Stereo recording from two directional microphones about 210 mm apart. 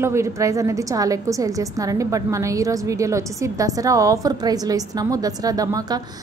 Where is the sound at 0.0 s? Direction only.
15° right (ahead or behind).